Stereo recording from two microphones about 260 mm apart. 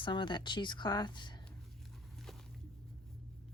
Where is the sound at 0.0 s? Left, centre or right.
Centre.